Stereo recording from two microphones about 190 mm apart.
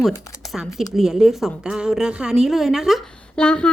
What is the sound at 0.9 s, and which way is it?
A woman's voice, centre (ahead or behind).